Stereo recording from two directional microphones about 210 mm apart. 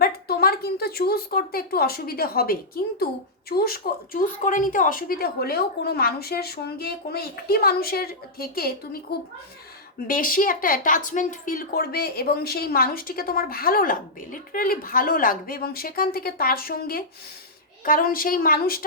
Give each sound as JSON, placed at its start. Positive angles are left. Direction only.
{"t": 0.0, "sound": "a woman's voice", "side_deg": 45}
{"t": 10.1, "sound": "a woman's voice", "side_deg": 40}